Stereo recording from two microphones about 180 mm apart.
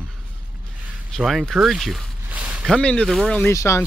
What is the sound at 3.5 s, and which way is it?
Speech, 15° left (ahead or behind).